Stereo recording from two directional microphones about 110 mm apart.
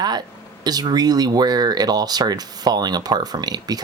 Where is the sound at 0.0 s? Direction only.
40° right (ahead or behind).